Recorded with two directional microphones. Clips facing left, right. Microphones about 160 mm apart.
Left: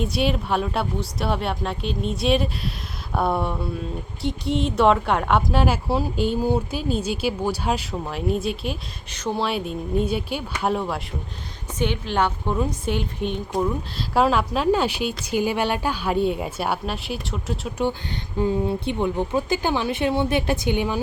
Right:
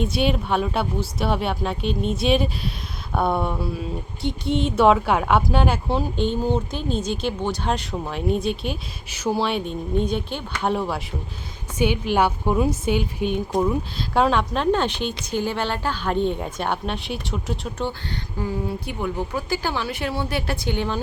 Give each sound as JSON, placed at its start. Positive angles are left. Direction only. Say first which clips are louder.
{"t": 0.0, "sound": "speech", "louder": "right 1 dB", "side_deg": 0}
{"t": 18.3, "sound": "a woman's voice", "louder": "left 5 dB", "side_deg": 25}